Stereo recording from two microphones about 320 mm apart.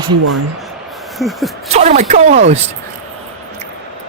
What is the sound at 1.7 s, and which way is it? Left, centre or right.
Speech, right.